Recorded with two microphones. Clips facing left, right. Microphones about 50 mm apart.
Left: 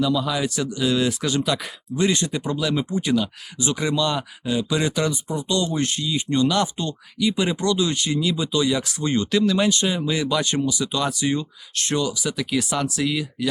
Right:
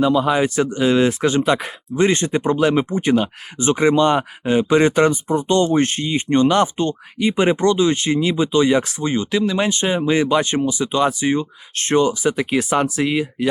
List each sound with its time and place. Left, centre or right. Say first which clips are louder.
0.0 s speech: right 6 dB; right
9.0 s speech: right 1 dB; centre